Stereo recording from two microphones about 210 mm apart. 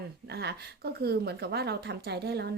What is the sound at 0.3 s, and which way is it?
Speech, 50° right (ahead or behind).